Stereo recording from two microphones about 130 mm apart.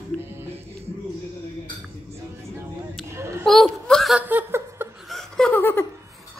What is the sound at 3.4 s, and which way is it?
Whimper, centre (ahead or behind).